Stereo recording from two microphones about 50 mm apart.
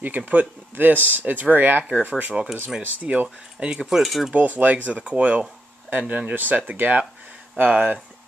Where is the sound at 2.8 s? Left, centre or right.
Right.